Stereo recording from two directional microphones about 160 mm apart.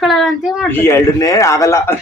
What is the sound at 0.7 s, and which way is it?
Speech, 15° left (ahead or behind).